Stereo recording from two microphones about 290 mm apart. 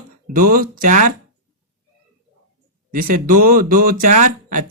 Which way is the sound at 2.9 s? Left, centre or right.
Right.